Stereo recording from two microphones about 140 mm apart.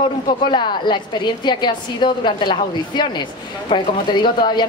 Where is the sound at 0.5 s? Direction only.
35° left (ahead or behind).